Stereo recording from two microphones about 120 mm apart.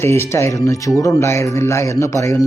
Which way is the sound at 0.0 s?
20° left (ahead or behind).